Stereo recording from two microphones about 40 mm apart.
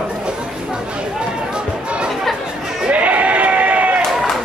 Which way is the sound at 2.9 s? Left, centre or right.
Right.